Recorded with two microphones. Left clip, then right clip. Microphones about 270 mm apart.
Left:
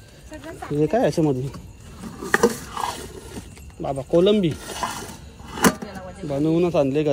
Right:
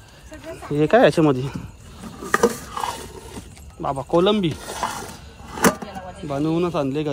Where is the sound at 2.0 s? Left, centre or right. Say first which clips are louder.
Even; centre.